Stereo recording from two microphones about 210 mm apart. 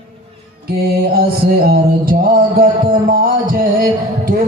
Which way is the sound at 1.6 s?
45° right (ahead or behind).